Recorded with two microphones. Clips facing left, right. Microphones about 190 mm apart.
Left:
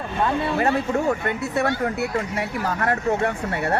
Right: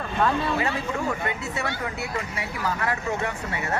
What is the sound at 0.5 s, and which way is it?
Speech, 50° left (ahead or behind).